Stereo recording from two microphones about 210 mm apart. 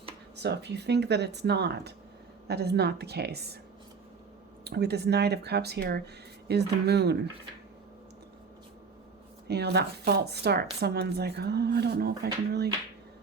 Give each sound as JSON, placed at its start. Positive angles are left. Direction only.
{"t": 0.3, "sound": "speech", "side_deg": -55}
{"t": 4.6, "sound": "speech", "side_deg": -50}
{"t": 9.5, "sound": "speech", "side_deg": -50}